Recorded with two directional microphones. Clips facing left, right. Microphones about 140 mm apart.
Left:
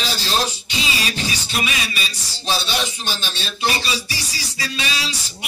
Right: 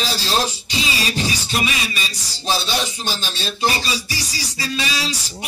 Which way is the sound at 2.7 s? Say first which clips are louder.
Right 1 dB; 35° right (ahead or behind).